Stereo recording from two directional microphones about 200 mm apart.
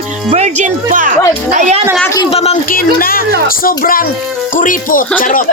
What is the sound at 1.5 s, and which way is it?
Speech, 35° right (ahead or behind).